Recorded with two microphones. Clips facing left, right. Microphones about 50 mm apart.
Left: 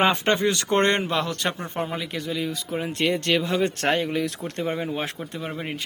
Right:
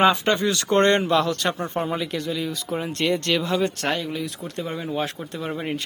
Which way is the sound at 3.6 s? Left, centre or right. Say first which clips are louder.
Left 1 dB; left.